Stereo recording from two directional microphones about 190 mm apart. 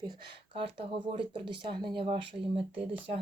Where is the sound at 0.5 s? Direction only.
25° right (ahead or behind).